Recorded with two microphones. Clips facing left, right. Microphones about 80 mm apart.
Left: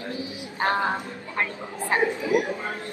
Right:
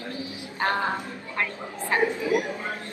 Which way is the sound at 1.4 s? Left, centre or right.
Left.